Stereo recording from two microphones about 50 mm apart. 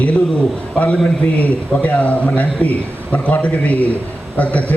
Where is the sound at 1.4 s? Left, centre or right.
Left.